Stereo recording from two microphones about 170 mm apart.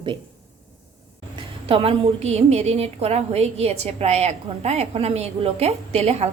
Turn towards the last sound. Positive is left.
turn(degrees=-40)  # may be behind; listen again after turning